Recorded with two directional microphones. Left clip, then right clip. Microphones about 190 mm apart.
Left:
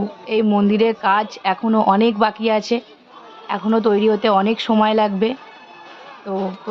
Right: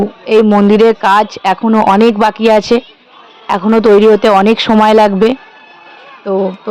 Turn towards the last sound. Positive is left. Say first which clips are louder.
# right 10 dB
turn(degrees=-35)  # may be behind; listen again after turning